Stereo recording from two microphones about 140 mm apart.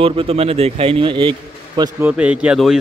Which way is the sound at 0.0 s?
40° right (ahead or behind).